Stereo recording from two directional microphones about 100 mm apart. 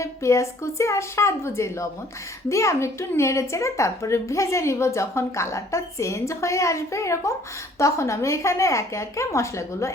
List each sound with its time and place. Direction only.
0.0 s a woman's voice: 30° left (ahead or behind)